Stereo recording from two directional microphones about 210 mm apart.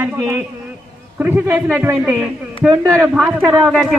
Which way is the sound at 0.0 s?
10° right (ahead or behind).